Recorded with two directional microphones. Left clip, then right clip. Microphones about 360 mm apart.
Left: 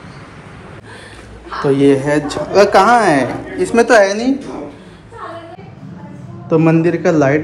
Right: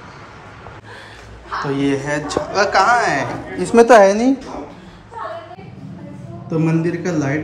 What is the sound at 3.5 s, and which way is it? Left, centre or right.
Speech, centre.